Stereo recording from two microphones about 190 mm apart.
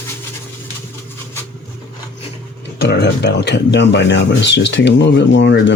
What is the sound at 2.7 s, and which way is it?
Speech, 60° left (ahead or behind).